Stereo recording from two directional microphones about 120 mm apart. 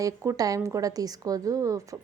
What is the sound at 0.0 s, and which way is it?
A woman's voice, 25° right (ahead or behind).